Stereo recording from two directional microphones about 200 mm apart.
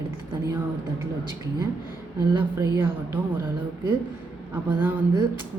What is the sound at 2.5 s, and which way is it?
Speech, 15° right (ahead or behind).